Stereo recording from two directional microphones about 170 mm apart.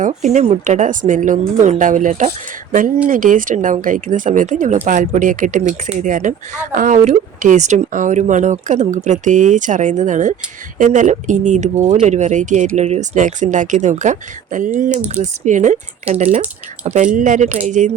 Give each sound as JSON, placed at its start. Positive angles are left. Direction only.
{"t": 0.0, "sound": "speech", "side_deg": -45}